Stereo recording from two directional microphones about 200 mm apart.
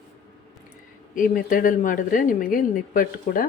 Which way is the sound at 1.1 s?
45° left (ahead or behind).